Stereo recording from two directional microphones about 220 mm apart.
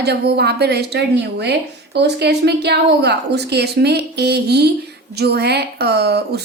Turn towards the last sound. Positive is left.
turn(degrees=-50)  # may be behind; listen again after turning